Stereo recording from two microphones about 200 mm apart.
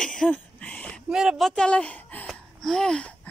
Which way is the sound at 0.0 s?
Centre (ahead or behind).